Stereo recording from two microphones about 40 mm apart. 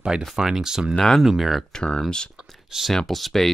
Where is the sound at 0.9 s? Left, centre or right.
Centre.